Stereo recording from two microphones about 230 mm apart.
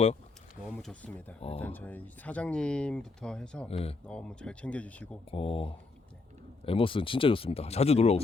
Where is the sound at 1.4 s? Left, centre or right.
Left.